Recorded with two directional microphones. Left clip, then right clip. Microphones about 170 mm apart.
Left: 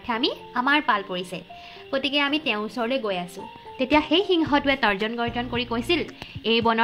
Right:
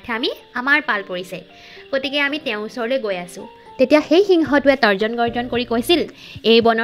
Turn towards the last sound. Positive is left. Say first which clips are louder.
# right 9 dB
turn(degrees=-60)  # may be behind; listen again after turning